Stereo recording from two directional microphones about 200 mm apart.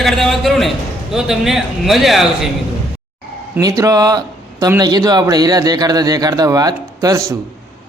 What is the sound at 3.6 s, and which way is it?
A man's voice, 15° right (ahead or behind).